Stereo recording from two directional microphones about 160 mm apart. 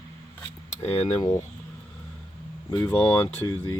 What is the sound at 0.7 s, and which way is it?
Cutlery, 40° left (ahead or behind).